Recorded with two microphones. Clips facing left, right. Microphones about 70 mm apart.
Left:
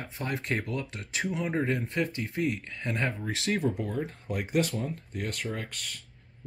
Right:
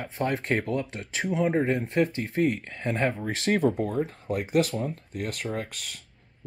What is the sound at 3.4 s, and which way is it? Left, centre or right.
Speech, right.